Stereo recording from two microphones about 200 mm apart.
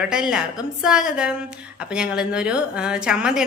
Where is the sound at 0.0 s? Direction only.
5° right (ahead or behind).